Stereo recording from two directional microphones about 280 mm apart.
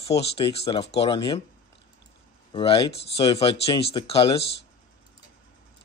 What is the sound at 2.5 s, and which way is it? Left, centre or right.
Speech, centre.